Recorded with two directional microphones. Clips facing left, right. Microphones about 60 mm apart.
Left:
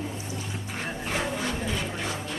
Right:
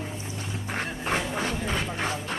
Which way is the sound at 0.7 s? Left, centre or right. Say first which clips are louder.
Right 3 dB; right.